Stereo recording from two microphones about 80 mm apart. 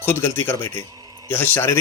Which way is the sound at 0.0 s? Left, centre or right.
Left.